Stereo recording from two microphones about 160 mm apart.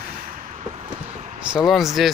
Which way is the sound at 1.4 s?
5° right (ahead or behind).